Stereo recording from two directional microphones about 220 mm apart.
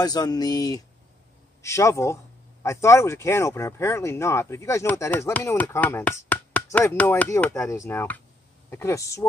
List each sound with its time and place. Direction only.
0.0 s speech: 15° left (ahead or behind)